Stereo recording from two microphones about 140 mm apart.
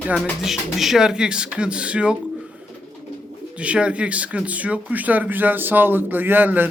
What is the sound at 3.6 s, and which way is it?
Speech, 10° right (ahead or behind).